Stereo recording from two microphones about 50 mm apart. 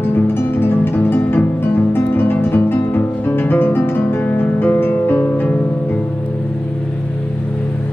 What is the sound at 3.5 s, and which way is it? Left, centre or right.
Guitar, left.